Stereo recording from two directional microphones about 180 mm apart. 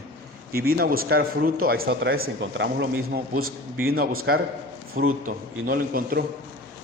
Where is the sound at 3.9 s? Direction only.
55° right (ahead or behind).